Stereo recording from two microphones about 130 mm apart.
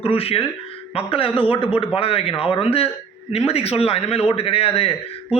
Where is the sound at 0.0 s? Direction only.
45° left (ahead or behind).